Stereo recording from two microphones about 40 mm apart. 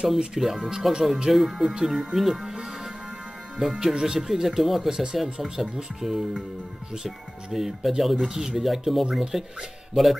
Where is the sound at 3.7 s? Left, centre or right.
Centre.